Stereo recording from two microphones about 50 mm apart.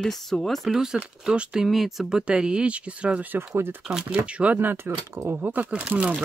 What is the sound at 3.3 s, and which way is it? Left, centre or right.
Speech, right.